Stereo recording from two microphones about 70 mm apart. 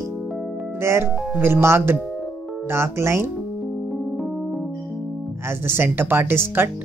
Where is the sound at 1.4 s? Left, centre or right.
Right.